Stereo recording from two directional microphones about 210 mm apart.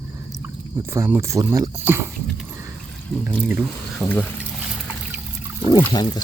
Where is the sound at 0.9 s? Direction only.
10° right (ahead or behind).